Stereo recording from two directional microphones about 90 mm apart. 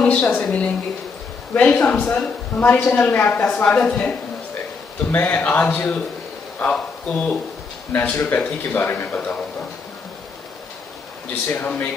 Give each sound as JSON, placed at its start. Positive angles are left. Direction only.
{"t": 0.0, "sound": "a woman's voice", "side_deg": 15}
{"t": 11.4, "sound": "speech", "side_deg": 25}